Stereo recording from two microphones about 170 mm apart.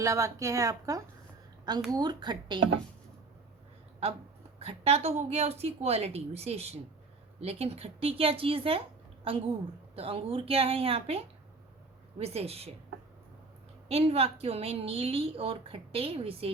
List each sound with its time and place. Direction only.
0.0 s a woman's voice: 20° right (ahead or behind)
4.6 s a woman's voice: 35° right (ahead or behind)
13.8 s a woman's voice: 35° right (ahead or behind)